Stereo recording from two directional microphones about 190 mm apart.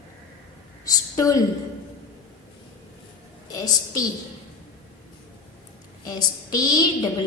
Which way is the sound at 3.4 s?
20° left (ahead or behind).